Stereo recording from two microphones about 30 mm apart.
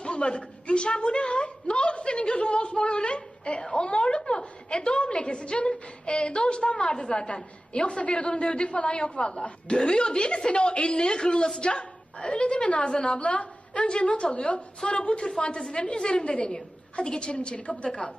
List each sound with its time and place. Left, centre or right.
0.0 s a woman's voice: left